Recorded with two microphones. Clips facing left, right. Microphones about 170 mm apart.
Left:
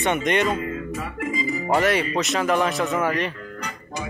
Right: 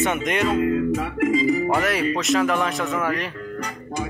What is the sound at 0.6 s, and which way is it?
Music, 70° right (ahead or behind).